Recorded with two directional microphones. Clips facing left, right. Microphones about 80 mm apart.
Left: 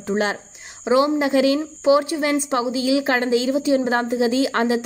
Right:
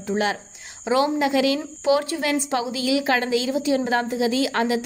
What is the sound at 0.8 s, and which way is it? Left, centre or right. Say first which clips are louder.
A woman's voice: left 3 dB; left.